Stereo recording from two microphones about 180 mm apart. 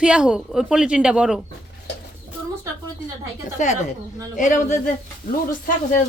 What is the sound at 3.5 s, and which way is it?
A woman's voice, 40° left (ahead or behind).